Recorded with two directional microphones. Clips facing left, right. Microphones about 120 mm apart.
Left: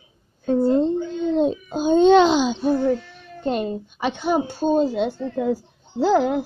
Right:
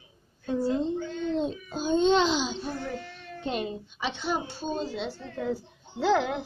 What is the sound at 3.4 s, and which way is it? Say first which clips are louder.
A child's voice: left 8 dB; 45° left (ahead or behind).